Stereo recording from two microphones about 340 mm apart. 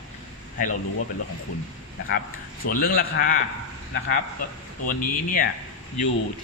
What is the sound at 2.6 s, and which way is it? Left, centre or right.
Speech, left.